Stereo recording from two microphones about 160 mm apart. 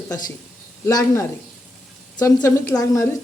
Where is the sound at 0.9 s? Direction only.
20° left (ahead or behind).